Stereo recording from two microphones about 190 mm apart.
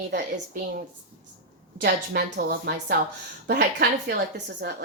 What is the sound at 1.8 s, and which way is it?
A woman's voice, 55° right (ahead or behind).